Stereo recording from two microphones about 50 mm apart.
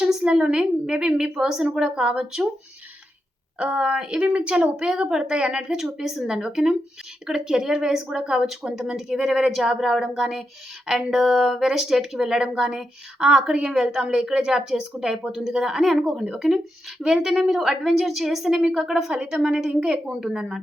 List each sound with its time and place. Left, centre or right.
0.0 s speech: centre
3.6 s speech: centre